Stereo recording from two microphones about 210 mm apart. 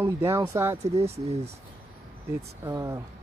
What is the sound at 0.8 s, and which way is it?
Speech, 30° right (ahead or behind).